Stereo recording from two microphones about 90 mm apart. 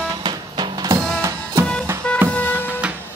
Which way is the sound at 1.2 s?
35° right (ahead or behind).